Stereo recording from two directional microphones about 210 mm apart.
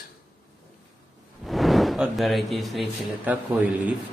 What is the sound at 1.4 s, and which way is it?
Speech, centre (ahead or behind).